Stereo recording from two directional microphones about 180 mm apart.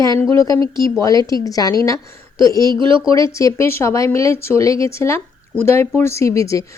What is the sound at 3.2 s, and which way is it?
A woman's voice, 15° left (ahead or behind).